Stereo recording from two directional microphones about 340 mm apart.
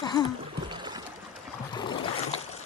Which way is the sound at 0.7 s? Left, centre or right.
Centre.